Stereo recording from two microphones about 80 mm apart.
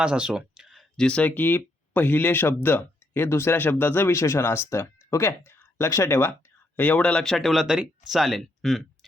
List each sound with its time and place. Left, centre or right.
0.0 s speech: centre
0.9 s speech: centre; by 6.3 s left
6.7 s speech: centre